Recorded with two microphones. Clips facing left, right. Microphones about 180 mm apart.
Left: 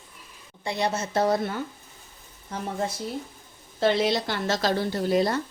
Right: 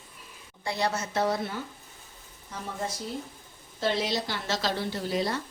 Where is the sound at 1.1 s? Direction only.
40° left (ahead or behind).